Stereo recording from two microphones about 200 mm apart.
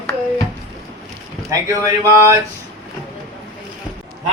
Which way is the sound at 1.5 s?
15° right (ahead or behind).